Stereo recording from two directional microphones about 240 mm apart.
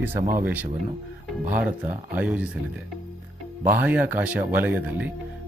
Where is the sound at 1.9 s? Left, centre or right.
Centre.